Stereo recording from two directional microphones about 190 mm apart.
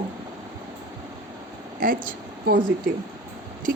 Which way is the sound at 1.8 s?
45° right (ahead or behind).